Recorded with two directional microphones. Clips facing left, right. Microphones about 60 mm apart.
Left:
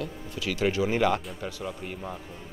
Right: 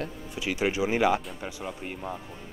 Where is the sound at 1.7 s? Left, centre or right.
Centre.